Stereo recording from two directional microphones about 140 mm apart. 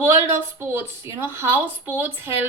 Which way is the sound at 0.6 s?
15° right (ahead or behind).